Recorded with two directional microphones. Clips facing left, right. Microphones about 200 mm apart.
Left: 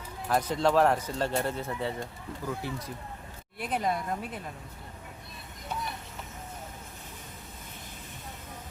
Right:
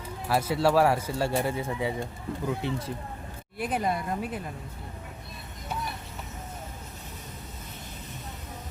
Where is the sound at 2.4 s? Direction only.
25° right (ahead or behind).